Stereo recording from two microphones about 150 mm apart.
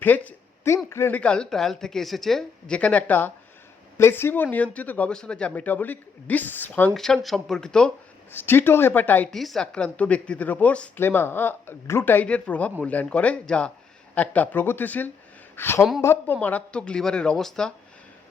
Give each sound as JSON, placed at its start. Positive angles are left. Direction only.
{"t": 0.0, "sound": "a sound", "side_deg": 10}
{"t": 0.9, "sound": "speech", "side_deg": 15}
{"t": 9.3, "sound": "speech", "side_deg": 0}